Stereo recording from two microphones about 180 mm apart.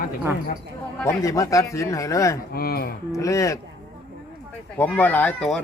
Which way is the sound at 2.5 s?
55° left (ahead or behind).